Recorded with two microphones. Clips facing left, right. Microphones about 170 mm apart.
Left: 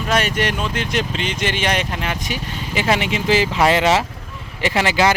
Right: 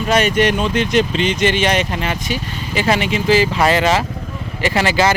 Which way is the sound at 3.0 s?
20° left (ahead or behind).